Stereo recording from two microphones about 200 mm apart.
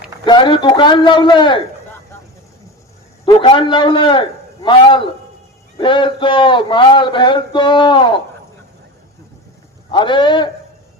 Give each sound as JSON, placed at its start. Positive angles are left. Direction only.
{"t": 0.3, "sound": "a man's voice", "side_deg": 25}
{"t": 3.2, "sound": "a man's voice", "side_deg": 25}
{"t": 9.9, "sound": "a man's voice", "side_deg": 25}